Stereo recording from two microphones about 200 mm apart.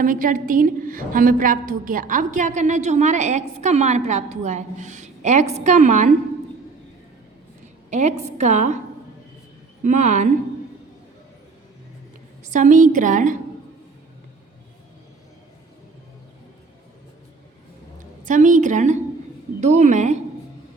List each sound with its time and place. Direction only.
0.0 s a woman's voice: 45° right (ahead or behind)
7.9 s a woman's voice: 35° right (ahead or behind)
9.8 s a woman's voice: 35° right (ahead or behind)
12.5 s a woman's voice: 40° right (ahead or behind)
18.2 s a woman's voice: 40° right (ahead or behind)